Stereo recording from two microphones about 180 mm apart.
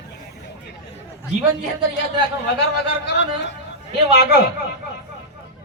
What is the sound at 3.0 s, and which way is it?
Speech, 75° left (ahead or behind).